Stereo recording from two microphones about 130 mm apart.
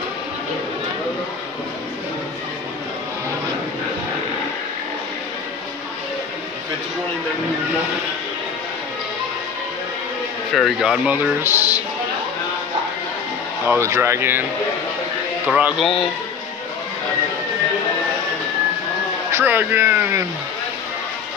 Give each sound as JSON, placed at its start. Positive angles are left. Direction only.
{"t": 10.5, "sound": "speech", "side_deg": 0}
{"t": 11.4, "sound": "speech", "side_deg": -15}
{"t": 13.7, "sound": "speech", "side_deg": -20}
{"t": 15.4, "sound": "speech", "side_deg": -10}
{"t": 15.8, "sound": "speech", "side_deg": 5}
{"t": 19.3, "sound": "speech", "side_deg": -15}